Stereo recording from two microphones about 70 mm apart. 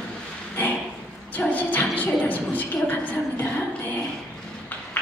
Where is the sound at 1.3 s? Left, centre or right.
Left.